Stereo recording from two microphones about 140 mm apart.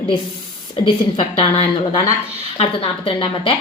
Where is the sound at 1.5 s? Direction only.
40° left (ahead or behind).